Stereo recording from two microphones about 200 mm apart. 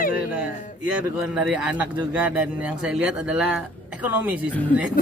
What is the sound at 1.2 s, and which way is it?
Speech, 5° right (ahead or behind).